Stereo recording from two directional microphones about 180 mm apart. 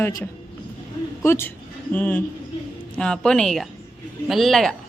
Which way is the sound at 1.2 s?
10° left (ahead or behind).